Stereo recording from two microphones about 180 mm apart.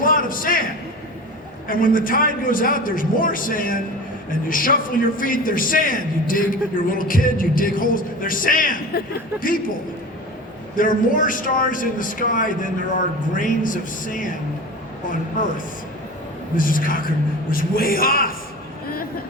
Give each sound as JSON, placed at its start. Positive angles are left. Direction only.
{"t": 0.0, "sound": "a sound", "side_deg": 50}
{"t": 1.6, "sound": "a man's voice", "side_deg": 50}
{"t": 10.8, "sound": "a man's voice", "side_deg": 50}
{"t": 15.4, "sound": "a man's voice", "side_deg": 45}
{"t": 16.6, "sound": "a man's voice", "side_deg": 50}